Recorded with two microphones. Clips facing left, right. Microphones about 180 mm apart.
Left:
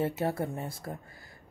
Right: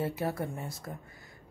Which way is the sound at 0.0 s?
25° left (ahead or behind).